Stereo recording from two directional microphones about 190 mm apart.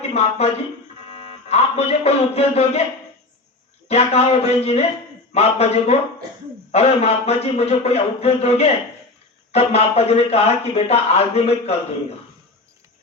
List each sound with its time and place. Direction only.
0.1 s a man's voice: 30° left (ahead or behind)
3.8 s speech: 35° left (ahead or behind)